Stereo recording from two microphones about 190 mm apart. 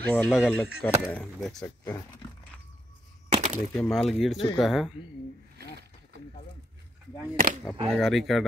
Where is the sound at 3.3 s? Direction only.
35° right (ahead or behind).